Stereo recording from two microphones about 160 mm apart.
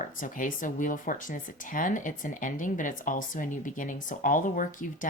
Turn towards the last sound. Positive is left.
turn(degrees=55)  # may be behind; listen again after turning